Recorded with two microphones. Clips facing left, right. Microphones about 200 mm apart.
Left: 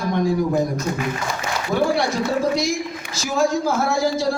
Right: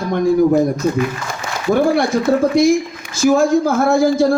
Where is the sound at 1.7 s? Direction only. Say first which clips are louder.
Right 5 dB; 50° right (ahead or behind).